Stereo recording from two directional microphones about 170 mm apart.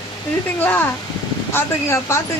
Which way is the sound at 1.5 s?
15° left (ahead or behind).